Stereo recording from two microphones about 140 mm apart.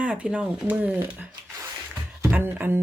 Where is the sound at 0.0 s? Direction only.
10° right (ahead or behind).